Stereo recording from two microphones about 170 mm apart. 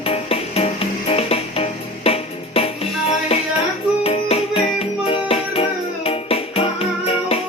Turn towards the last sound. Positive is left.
turn(degrees=35)  # may be behind; listen again after turning